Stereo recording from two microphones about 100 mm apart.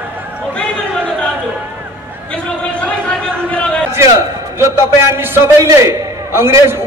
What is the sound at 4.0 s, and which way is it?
A man's voice, 30° right (ahead or behind).